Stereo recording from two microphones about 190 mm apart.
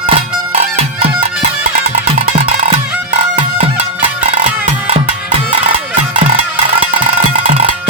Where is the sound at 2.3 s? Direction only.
30° right (ahead or behind).